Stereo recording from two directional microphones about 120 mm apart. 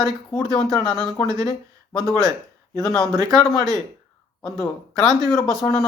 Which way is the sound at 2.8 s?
5° left (ahead or behind).